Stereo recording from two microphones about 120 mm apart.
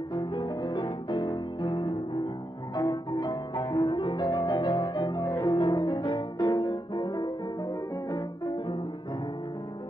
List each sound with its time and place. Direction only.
0.1 s music: 35° left (ahead or behind)
3.9 s music: 40° left (ahead or behind)